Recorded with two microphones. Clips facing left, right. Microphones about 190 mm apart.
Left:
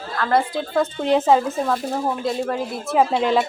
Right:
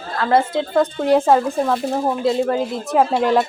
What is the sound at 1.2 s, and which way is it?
Speech, 5° left (ahead or behind).